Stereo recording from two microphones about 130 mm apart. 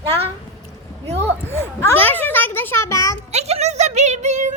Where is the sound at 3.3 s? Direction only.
55° right (ahead or behind).